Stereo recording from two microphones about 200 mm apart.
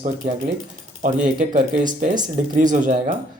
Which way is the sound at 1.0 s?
40° right (ahead or behind).